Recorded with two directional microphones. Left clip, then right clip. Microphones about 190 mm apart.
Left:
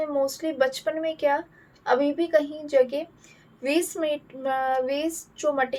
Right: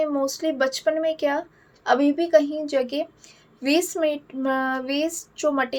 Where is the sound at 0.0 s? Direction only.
50° right (ahead or behind).